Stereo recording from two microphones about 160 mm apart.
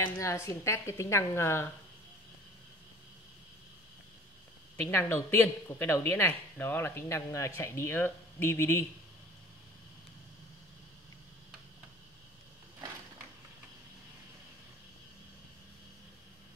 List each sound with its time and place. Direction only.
0.0 s speech: 20° left (ahead or behind)
4.7 s speech: 15° left (ahead or behind)